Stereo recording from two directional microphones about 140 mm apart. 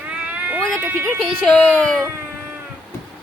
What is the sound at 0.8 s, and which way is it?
Speech, 15° right (ahead or behind).